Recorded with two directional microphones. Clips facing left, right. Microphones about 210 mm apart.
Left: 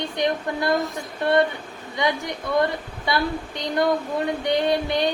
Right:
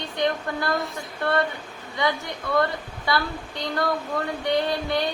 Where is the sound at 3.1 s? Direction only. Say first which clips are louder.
Left 2 dB; 20° left (ahead or behind).